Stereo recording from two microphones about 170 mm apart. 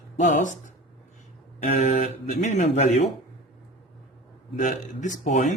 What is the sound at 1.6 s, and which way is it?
Speech, 45° left (ahead or behind).